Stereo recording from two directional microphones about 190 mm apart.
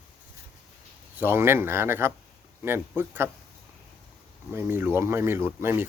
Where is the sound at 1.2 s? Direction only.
10° right (ahead or behind).